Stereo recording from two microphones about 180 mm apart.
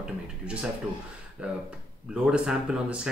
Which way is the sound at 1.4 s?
5° right (ahead or behind).